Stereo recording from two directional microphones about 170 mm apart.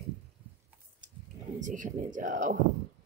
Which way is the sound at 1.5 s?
50° right (ahead or behind).